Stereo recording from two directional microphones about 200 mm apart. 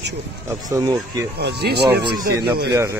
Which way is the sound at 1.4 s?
55° right (ahead or behind).